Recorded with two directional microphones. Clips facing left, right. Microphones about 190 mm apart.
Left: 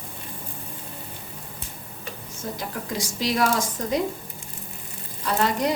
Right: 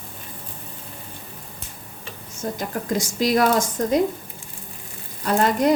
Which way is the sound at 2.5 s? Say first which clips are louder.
Right 6 dB; 50° right (ahead or behind).